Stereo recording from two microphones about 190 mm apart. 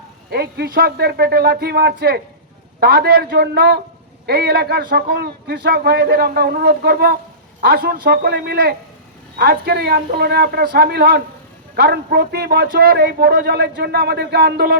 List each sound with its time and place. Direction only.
0.3 s a man's voice: 55° right (ahead or behind)